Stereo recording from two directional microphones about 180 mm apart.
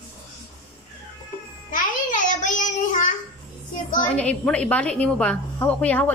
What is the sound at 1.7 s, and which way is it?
Child singing, 45° left (ahead or behind).